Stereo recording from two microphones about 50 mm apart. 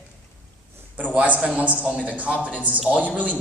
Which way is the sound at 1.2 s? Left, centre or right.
Right.